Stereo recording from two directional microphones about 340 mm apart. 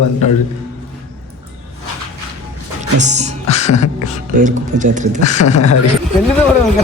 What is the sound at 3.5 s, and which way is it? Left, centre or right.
Speech, centre.